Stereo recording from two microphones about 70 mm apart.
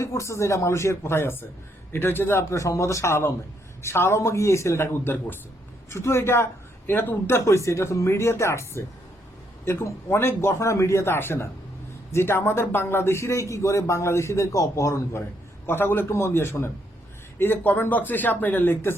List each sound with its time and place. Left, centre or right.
0.0 s a man's voice: left
5.9 s a man's voice: left
7.3 s a man's voice: left
10.1 s a man's voice: left
14.5 s a man's voice: left
15.6 s a man's voice: left